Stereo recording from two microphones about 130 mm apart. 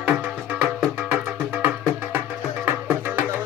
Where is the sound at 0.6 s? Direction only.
10° right (ahead or behind).